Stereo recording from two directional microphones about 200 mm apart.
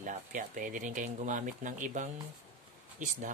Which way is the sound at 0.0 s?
40° right (ahead or behind).